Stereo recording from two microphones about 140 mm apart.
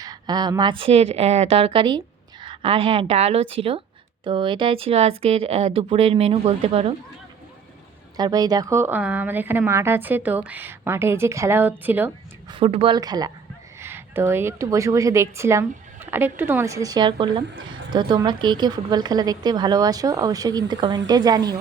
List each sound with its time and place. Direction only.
0.0 s a woman's voice: 30° right (ahead or behind)
8.1 s a woman's voice: 30° right (ahead or behind)
12.5 s a woman's voice: 40° right (ahead or behind)
13.0 s a woman's voice: 30° right (ahead or behind)
13.7 s a woman's voice: 15° right (ahead or behind)